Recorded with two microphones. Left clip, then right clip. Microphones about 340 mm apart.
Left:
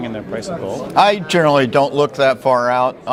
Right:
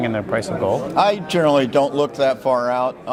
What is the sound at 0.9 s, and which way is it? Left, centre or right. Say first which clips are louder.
Speech: left 7 dB; left.